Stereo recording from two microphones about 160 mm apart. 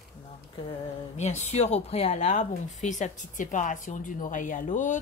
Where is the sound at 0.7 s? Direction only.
45° left (ahead or behind).